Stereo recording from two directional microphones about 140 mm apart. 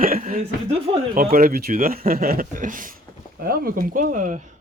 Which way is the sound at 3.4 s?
90° right.